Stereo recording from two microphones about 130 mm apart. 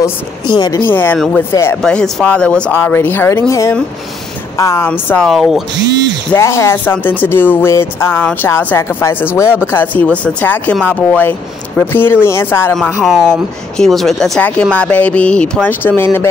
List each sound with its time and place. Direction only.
0.5 s speech: 35° left (ahead or behind)
0.8 s speech: 15° left (ahead or behind)
1.8 s speech: 5° left (ahead or behind)
5.2 s speech: centre (ahead or behind)
6.3 s speech: 20° left (ahead or behind)
13.0 s speech: centre (ahead or behind); by 16.3 s 15° left (ahead or behind)